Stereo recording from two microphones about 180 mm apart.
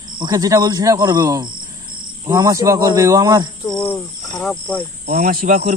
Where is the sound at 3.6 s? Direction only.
25° left (ahead or behind).